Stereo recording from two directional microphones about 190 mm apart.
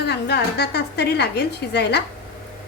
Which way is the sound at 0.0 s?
60° left (ahead or behind).